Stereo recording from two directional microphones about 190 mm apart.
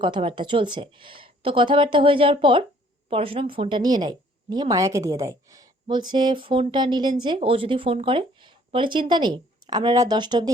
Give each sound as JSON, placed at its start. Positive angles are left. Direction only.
{"t": 0.0, "sound": "a woman's voice", "side_deg": -25}